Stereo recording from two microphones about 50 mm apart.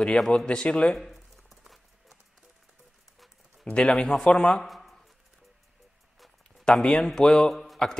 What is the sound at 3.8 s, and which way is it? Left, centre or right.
Speech, centre.